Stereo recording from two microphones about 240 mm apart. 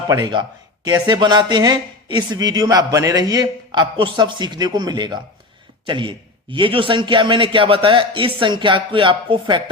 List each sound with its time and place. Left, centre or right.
0.1 s a man's voice: centre